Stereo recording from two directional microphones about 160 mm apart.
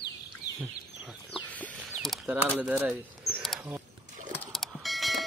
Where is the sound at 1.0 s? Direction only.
5° right (ahead or behind).